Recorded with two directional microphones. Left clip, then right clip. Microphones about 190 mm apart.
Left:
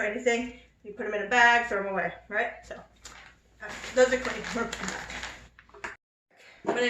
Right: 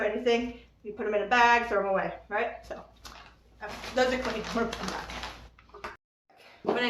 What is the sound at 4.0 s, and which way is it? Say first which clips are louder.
Speech: left 4 dB; 20° right (ahead or behind).